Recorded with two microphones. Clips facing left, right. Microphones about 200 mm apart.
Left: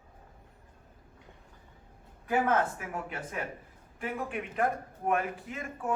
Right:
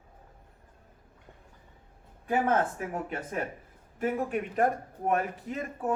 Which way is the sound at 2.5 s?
40° right (ahead or behind).